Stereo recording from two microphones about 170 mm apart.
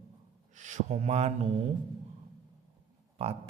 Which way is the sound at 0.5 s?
45° right (ahead or behind).